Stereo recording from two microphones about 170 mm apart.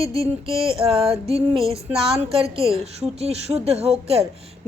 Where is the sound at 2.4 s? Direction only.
15° left (ahead or behind).